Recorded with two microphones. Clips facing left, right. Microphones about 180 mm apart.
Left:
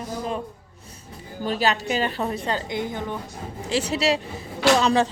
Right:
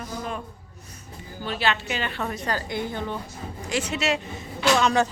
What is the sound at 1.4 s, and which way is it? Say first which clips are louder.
A woman's voice: left 3 dB; 40° left (ahead or behind).